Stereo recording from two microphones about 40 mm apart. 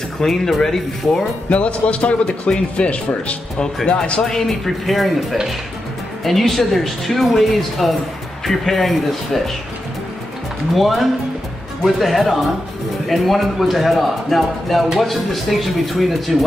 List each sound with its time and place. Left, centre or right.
0.2 s speech: centre
1.5 s speech: left
4.2 s speech: centre
10.7 s speech: centre